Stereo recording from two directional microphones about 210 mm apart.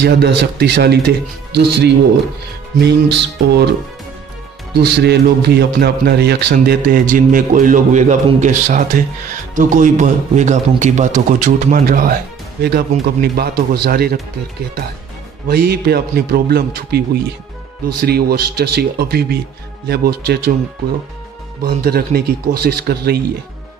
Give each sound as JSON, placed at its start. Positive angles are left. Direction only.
{"t": 0.0, "sound": "a man's voice", "side_deg": -50}
{"t": 4.7, "sound": "a man's voice", "side_deg": -50}
{"t": 15.4, "sound": "a man's voice", "side_deg": -50}
{"t": 21.6, "sound": "a man's voice", "side_deg": -45}